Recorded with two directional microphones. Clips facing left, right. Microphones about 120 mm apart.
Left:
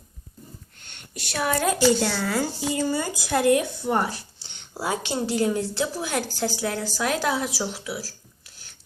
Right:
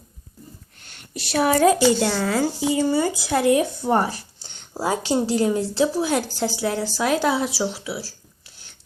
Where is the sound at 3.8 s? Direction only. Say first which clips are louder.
Right 4 dB; 40° right (ahead or behind).